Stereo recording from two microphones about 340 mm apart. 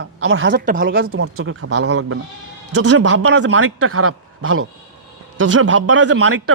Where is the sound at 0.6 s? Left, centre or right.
Right.